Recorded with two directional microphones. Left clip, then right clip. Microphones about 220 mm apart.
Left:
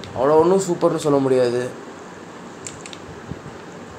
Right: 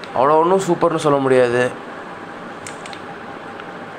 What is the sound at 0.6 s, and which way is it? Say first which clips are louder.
Speech: right 3 dB; 30° right (ahead or behind).